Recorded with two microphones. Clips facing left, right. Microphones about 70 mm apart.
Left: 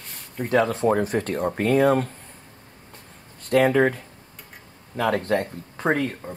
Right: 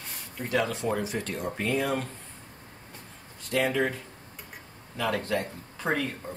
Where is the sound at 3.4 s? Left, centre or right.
Left.